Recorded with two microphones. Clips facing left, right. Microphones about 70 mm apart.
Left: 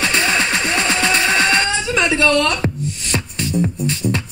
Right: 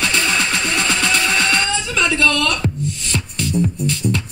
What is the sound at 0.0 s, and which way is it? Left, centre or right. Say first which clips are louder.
Music: left 2 dB; left.